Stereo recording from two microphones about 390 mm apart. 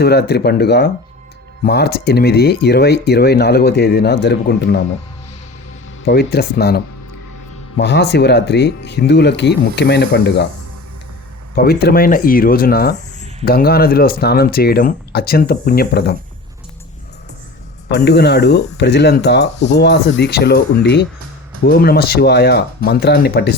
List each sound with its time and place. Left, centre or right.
0.0 s speech: left
6.1 s speech: left
11.5 s speech: left
17.9 s speech: left